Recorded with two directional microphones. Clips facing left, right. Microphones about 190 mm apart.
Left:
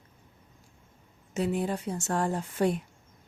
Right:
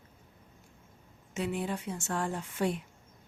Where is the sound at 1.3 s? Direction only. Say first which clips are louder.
Left 4 dB; 40° left (ahead or behind).